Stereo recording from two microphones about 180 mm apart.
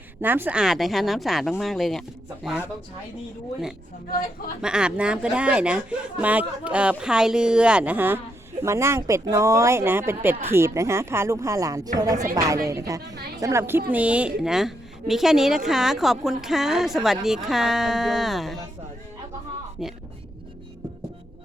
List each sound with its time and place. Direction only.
0.2 s a woman's voice: 10° right (ahead or behind)
4.6 s a woman's voice: 5° right (ahead or behind)
19.8 s a woman's voice: 5° right (ahead or behind)